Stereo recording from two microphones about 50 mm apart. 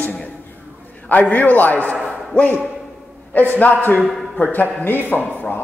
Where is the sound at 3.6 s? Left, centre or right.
Left.